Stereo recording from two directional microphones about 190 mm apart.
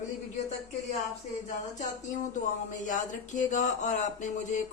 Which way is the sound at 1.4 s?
40° left (ahead or behind).